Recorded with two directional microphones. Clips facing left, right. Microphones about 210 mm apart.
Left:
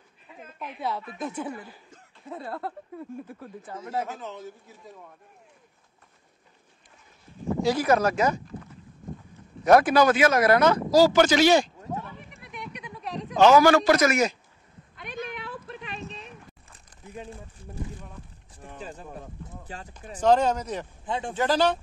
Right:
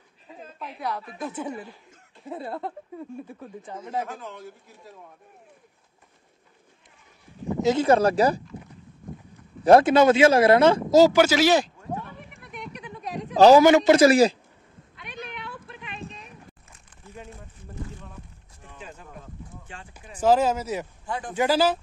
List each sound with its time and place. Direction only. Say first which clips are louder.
0.3 s a sound: right 3 dB; 35° right (ahead or behind)
2.2 s speech: right 3 dB; 10° right (ahead or behind)
3.8 s speech: even; 5° left (ahead or behind)
7.6 s speech: right 3 dB; 25° right (ahead or behind)
9.7 s speech: right 3 dB; 25° right (ahead or behind)
11.1 s speech: even; 5° right (ahead or behind)
13.3 s speech: right 4 dB; 35° right (ahead or behind)
13.6 s speech: right 3 dB; 20° right (ahead or behind)
15.0 s a sound: left 3 dB; 45° left (ahead or behind)
18.6 s a sound: left 4 dB; 35° left (ahead or behind)
19.6 s speech: left 3 dB; 35° left (ahead or behind)
19.9 s speech: right 1 dB; 10° right (ahead or behind)
21.0 s a sound: left 2 dB; 20° left (ahead or behind)
21.3 s speech: right 2 dB; 10° right (ahead or behind)